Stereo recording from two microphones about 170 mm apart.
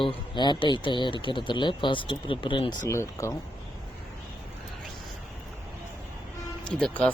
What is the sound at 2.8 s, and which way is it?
Speech, 15° left (ahead or behind).